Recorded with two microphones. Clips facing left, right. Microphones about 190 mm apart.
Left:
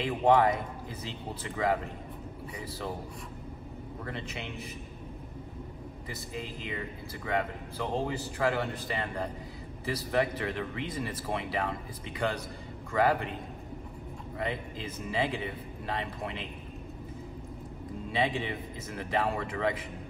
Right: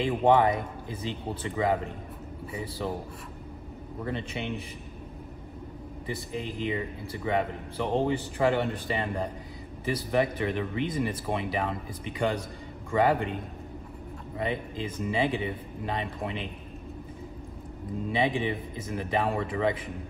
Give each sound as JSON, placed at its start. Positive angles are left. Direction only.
{"t": 0.0, "sound": "speech", "side_deg": -25}
{"t": 4.0, "sound": "speech", "side_deg": -20}
{"t": 6.0, "sound": "speech", "side_deg": -20}
{"t": 14.4, "sound": "speech", "side_deg": -20}
{"t": 18.1, "sound": "speech", "side_deg": -20}